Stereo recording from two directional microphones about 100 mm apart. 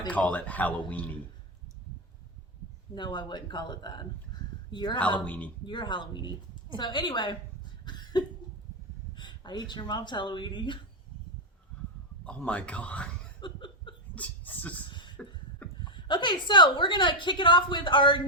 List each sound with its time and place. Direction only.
0.1 s speech: 15° left (ahead or behind)
2.9 s a woman's voice: 50° left (ahead or behind)
5.2 s speech: 15° left (ahead or behind)
5.6 s a woman's voice: 50° left (ahead or behind)
7.9 s cough: 45° left (ahead or behind)
9.1 s speech: 50° left (ahead or behind)
12.2 s speech: 10° left (ahead or behind)
13.4 s a sound: 55° left (ahead or behind)
14.2 s speech: 15° left (ahead or behind)
14.8 s a sound: 50° left (ahead or behind)
15.8 s a woman's voice: 50° left (ahead or behind)